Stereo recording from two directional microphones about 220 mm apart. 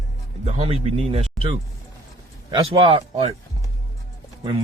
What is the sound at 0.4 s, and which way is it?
Speech, 25° right (ahead or behind).